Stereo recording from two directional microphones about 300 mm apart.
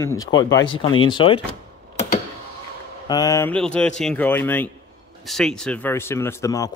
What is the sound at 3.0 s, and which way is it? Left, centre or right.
A man's voice, centre.